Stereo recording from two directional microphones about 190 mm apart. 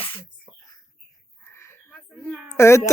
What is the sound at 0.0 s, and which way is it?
Sneeze, 25° left (ahead or behind).